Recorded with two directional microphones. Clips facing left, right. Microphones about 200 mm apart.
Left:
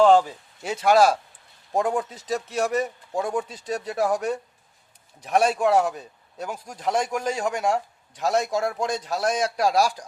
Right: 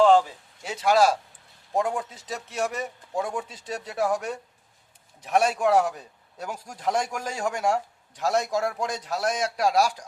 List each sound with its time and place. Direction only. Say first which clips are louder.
0.6 s speech: left 3 dB; 55° left (ahead or behind)
1.8 s a man's voice: left 3 dB; 40° left (ahead or behind)